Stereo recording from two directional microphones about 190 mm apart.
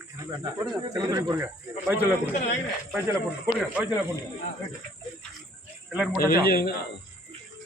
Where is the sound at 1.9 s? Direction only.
10° right (ahead or behind).